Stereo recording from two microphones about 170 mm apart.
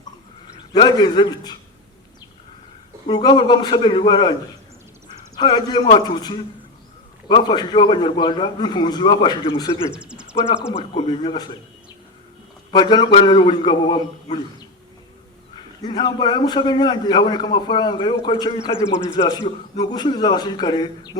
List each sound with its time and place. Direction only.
0.7 s a man's voice: 25° left (ahead or behind)
3.1 s a man's voice: 25° left (ahead or behind)
5.4 s a man's voice: 25° left (ahead or behind)
9.9 s speech: 5° right (ahead or behind)
10.9 s speech: 30° left (ahead or behind)
12.7 s a man's voice: 25° left (ahead or behind)
15.8 s a man's voice: 25° left (ahead or behind)